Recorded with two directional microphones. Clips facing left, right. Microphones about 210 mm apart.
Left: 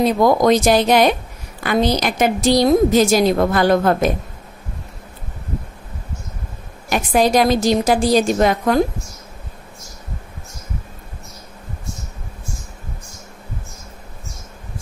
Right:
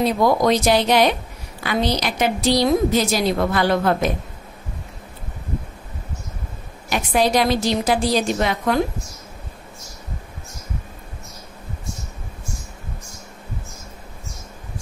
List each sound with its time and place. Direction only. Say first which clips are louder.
0.2 s a woman's voice: left 4 dB; 45° left (ahead or behind)
6.9 s a woman's voice: left 3 dB; 45° left (ahead or behind)